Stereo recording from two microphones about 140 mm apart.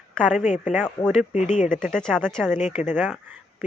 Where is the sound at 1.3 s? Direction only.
55° left (ahead or behind).